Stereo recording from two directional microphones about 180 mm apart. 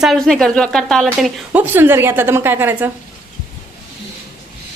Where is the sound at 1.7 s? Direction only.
10° right (ahead or behind).